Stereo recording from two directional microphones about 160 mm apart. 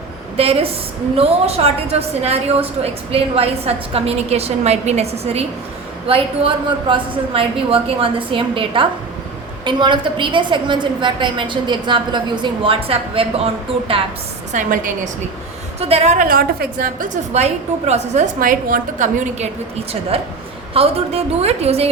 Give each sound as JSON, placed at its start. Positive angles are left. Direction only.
{"t": 0.3, "sound": "a woman's voice", "side_deg": -35}
{"t": 14.5, "sound": "a woman's voice", "side_deg": -50}
{"t": 15.8, "sound": "a woman's voice", "side_deg": -40}
{"t": 17.3, "sound": "a woman's voice", "side_deg": -45}
{"t": 20.1, "sound": "a woman's voice", "side_deg": -40}